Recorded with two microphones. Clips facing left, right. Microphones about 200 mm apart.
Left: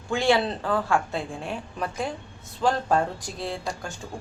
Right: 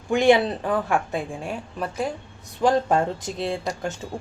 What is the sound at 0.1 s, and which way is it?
A woman's voice, 15° right (ahead or behind).